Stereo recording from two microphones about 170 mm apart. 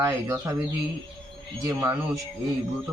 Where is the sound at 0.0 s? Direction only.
15° right (ahead or behind).